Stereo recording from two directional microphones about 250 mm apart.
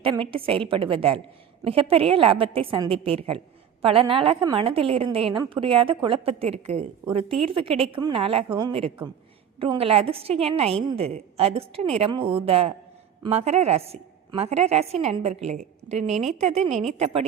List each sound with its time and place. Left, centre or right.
0.0 s a woman's voice: right